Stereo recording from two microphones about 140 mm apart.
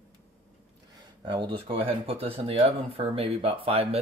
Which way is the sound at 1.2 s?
35° right (ahead or behind).